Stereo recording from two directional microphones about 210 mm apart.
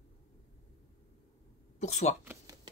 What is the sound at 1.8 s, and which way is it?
Speech, 35° left (ahead or behind).